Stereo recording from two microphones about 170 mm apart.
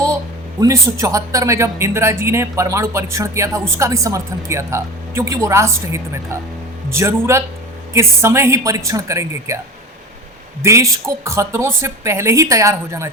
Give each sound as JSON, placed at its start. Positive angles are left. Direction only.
{"t": 0.6, "sound": "speech", "side_deg": -20}
{"t": 10.6, "sound": "speech", "side_deg": -15}